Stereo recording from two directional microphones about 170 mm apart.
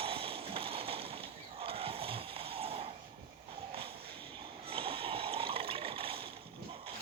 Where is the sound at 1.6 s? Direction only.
35° right (ahead or behind).